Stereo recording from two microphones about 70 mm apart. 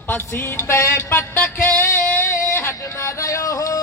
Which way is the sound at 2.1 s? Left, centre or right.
Left.